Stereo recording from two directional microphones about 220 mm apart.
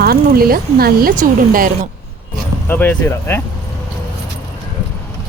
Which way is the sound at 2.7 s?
10° left (ahead or behind).